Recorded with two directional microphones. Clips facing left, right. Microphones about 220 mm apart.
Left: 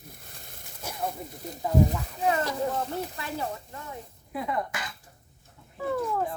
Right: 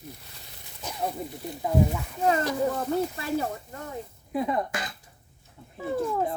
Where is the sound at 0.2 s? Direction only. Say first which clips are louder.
Left 1 dB; 50° left (ahead or behind).